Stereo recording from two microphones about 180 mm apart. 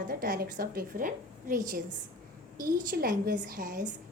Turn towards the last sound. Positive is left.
turn(degrees=-50)  # may be behind; listen again after turning